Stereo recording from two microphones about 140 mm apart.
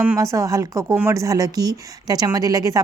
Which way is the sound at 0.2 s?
20° right (ahead or behind).